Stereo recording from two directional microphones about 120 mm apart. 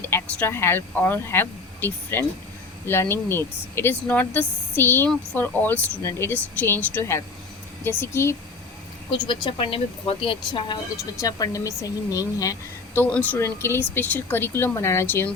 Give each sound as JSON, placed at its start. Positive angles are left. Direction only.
{"t": 0.0, "sound": "speech", "side_deg": 20}
{"t": 9.1, "sound": "speech", "side_deg": 45}
{"t": 11.2, "sound": "a woman's voice", "side_deg": 30}
{"t": 13.1, "sound": "speech", "side_deg": 10}